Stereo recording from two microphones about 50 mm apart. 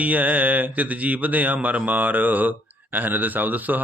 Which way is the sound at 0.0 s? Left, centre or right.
Right.